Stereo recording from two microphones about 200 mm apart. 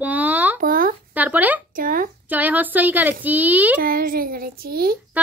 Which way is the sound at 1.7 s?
45° right (ahead or behind).